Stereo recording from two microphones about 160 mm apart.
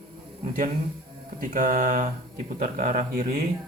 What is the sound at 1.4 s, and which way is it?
Speech, 60° right (ahead or behind).